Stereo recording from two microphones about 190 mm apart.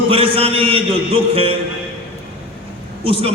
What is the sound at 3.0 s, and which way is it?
Speech, 30° right (ahead or behind).